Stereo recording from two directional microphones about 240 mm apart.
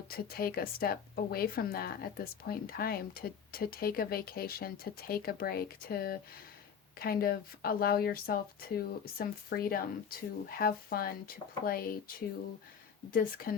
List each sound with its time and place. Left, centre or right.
0.1 s speech: left
13.1 s speech: left